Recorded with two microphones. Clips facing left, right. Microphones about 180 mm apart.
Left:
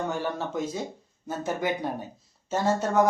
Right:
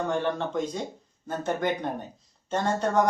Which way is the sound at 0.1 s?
5° left (ahead or behind).